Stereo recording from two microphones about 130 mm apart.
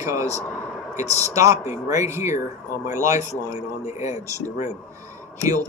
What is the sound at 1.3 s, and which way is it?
Speech, 25° right (ahead or behind).